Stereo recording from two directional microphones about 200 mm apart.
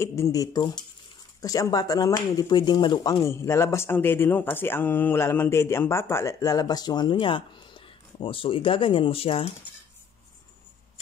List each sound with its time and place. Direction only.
0.0 s speech: 15° left (ahead or behind)